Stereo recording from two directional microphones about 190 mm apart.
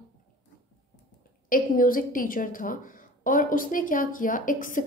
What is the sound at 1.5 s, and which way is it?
A woman's voice, 45° left (ahead or behind).